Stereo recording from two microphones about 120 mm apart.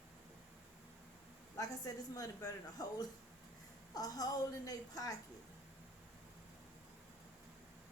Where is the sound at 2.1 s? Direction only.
30° left (ahead or behind).